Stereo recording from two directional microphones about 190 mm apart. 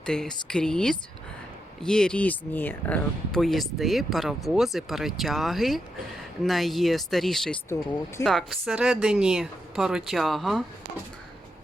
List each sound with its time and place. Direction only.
0.0 s speech: 5° left (ahead or behind)
7.7 s speech: 15° left (ahead or behind)
8.2 s speech: centre (ahead or behind)